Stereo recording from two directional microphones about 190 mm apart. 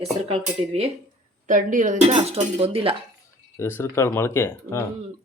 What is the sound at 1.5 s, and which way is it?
Speech, 40° right (ahead or behind).